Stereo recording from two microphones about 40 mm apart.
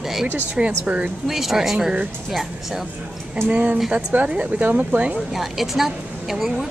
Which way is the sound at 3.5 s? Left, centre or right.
Right.